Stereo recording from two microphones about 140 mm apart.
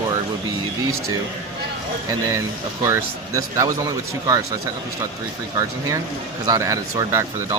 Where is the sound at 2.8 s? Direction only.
20° right (ahead or behind).